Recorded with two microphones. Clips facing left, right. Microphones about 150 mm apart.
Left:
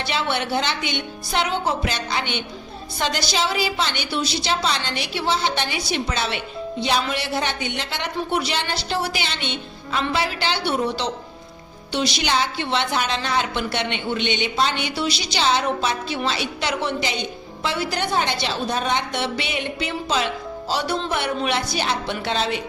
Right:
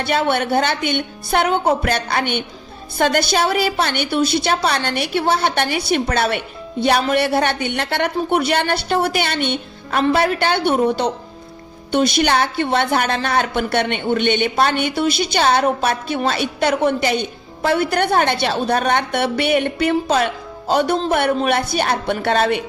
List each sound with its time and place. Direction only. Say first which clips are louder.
0.0 s a woman's voice: right 6 dB; 55° right (ahead or behind)